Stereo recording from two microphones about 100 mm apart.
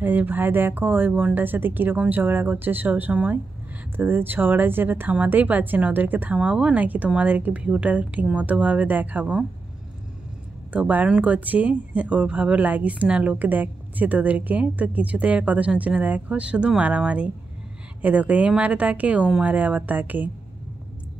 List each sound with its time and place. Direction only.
0.0 s speech: 20° right (ahead or behind)
10.7 s speech: 15° right (ahead or behind)